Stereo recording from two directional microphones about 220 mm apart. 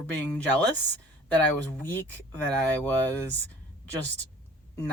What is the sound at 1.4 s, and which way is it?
Speech, 10° left (ahead or behind).